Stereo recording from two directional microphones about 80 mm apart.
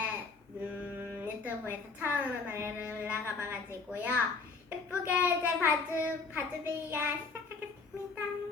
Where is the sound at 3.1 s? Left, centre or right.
Right.